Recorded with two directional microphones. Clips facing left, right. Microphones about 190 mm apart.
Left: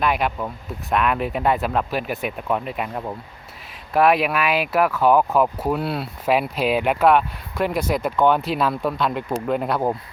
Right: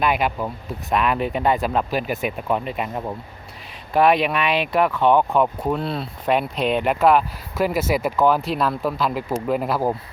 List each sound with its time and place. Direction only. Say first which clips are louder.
0.0 s speech: right 1 dB; centre (ahead or behind)